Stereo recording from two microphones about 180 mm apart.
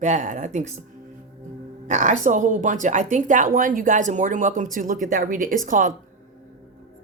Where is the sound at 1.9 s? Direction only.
40° right (ahead or behind).